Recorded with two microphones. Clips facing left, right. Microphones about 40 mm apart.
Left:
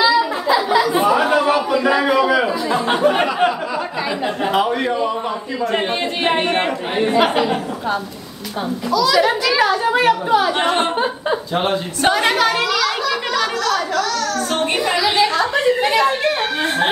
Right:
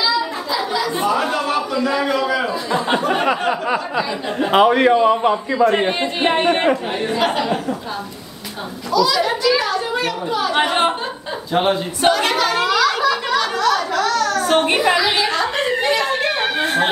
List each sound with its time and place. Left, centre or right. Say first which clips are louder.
0.7 s a sound: left 2 dB; centre
4.5 s a man's voice: right 7 dB; right
5.7 s speech: right 2 dB; centre
7.0 s speech: left 4 dB; centre
8.9 s speech: left 1 dB; centre
9.2 s a woman's voice: left 2 dB; centre
11.5 s speech: right 1 dB; centre
12.1 s a woman's voice: left 2 dB; centre
12.6 s a sound: right 3 dB; centre
13.7 s a child's voice: right 1 dB; centre
14.0 s a child's voice: right 3 dB; right
15.0 s a sound: left 2 dB; centre
16.6 s speech: even; centre